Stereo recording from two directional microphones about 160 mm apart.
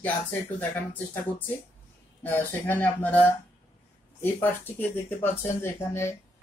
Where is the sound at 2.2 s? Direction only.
10° left (ahead or behind).